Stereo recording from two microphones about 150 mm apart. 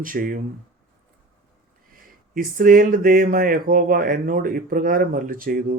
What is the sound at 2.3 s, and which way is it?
Speech, 70° right (ahead or behind).